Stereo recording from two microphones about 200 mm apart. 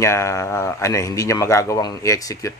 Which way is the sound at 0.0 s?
15° left (ahead or behind).